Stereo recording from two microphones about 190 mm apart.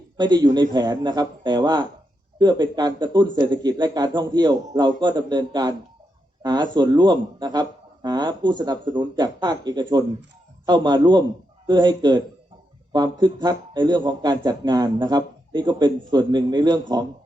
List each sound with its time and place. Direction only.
0.2 s speech: 20° right (ahead or behind)